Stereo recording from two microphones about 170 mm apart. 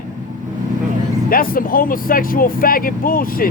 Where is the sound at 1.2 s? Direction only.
60° left (ahead or behind).